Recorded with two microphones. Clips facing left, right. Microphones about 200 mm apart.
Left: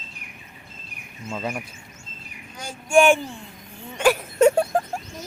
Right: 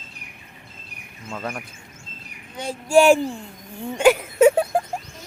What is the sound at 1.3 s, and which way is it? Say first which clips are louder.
Speech: left 1 dB; 15° left (ahead or behind).